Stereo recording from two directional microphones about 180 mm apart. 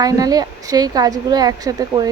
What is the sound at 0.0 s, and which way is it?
A woman's voice, 20° right (ahead or behind).